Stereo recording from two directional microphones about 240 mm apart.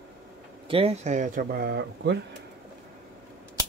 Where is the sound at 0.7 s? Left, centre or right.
Right.